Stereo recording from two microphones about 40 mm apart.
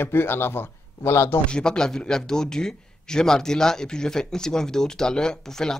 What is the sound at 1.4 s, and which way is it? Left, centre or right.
A man's voice, centre.